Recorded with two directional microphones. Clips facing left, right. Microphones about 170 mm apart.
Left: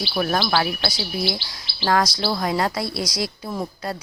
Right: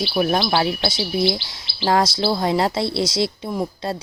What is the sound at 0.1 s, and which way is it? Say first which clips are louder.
Speech: right 1 dB; 20° right (ahead or behind).